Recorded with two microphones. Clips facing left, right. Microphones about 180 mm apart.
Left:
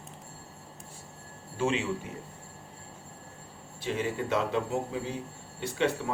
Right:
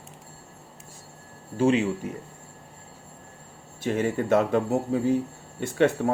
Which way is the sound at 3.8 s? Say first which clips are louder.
Right 6 dB; 50° right (ahead or behind).